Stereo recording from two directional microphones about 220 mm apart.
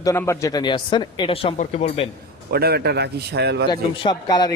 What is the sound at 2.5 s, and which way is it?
A man's voice, 45° right (ahead or behind).